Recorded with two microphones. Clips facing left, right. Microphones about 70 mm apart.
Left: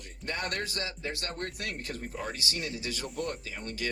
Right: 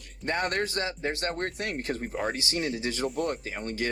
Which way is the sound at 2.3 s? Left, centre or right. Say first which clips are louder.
Right 5 dB; right.